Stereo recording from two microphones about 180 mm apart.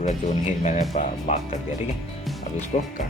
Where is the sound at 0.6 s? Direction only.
40° left (ahead or behind).